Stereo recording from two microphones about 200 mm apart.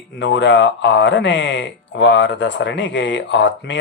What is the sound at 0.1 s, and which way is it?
Speech, 60° left (ahead or behind).